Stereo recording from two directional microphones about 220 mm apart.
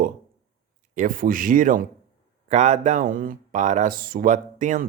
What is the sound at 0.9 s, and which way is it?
Speech, 40° right (ahead or behind).